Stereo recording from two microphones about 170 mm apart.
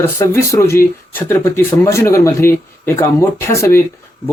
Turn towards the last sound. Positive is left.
turn(degrees=15)  # may be behind; listen again after turning